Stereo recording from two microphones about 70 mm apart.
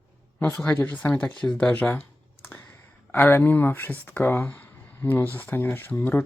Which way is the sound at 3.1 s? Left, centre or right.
Left.